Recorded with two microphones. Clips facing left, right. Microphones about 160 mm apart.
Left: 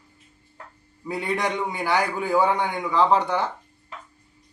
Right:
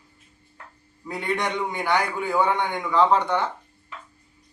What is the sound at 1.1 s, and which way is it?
A man's voice, 5° left (ahead or behind).